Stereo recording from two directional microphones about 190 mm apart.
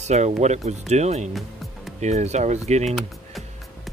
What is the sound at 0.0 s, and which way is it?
Speech, 35° right (ahead or behind).